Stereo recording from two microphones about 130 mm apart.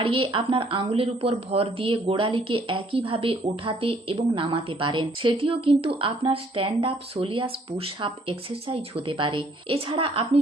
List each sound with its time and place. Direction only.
0.0 s speech: 45° right (ahead or behind)